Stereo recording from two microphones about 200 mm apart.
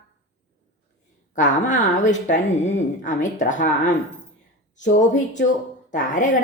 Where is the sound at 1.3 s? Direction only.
40° left (ahead or behind).